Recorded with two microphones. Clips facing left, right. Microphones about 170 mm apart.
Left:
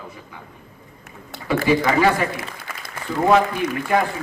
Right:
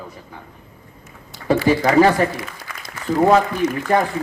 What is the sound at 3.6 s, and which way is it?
Speech, 55° left (ahead or behind).